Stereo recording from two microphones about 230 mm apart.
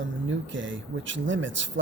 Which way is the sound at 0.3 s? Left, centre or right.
Right.